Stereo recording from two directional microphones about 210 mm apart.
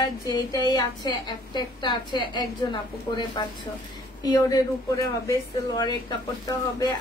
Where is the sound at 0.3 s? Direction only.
20° left (ahead or behind).